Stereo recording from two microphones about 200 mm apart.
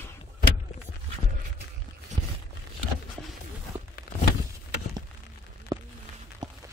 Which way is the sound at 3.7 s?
30° right (ahead or behind).